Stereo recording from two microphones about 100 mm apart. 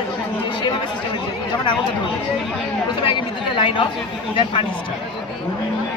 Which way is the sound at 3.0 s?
55° left (ahead or behind).